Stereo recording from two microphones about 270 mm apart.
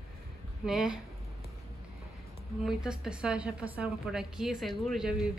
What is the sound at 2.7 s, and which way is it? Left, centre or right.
A woman's voice, centre.